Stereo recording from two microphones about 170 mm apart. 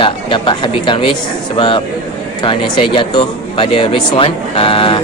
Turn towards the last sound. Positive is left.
turn(degrees=30)  # may be behind; listen again after turning